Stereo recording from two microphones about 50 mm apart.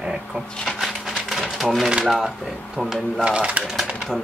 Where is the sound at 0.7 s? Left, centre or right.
Centre.